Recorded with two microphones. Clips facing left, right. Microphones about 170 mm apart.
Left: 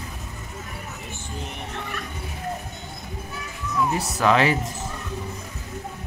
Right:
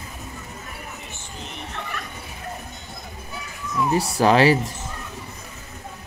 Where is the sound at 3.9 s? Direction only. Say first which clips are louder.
Right 4 dB; 35° right (ahead or behind).